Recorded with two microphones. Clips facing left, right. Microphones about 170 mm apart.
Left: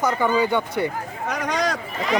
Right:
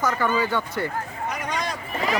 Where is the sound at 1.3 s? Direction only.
85° left.